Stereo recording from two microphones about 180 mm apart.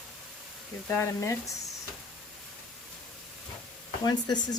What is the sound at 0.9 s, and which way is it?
Speech, 15° left (ahead or behind).